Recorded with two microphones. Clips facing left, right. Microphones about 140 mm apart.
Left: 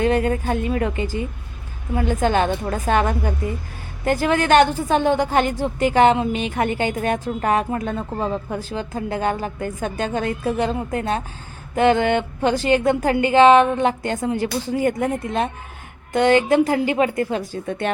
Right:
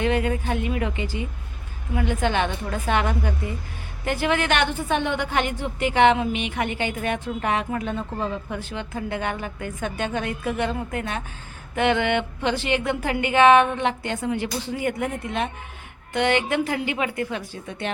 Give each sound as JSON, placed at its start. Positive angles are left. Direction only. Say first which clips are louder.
{"t": 0.0, "sound": "a woman's voice", "louder": "left 4 dB", "side_deg": 40}
{"t": 17.7, "sound": "speech", "louder": "left 6 dB", "side_deg": 50}